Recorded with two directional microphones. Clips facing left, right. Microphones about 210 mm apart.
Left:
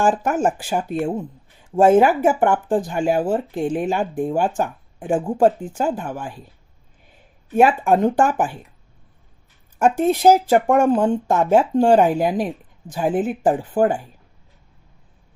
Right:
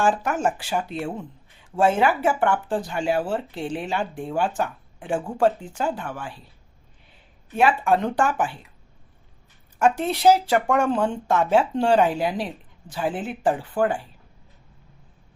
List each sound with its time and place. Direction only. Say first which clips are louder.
0.0 s speech: left 4 dB; 50° left (ahead or behind)
7.5 s speech: left 4 dB; 45° left (ahead or behind)
9.7 s speech: left 4 dB; 45° left (ahead or behind)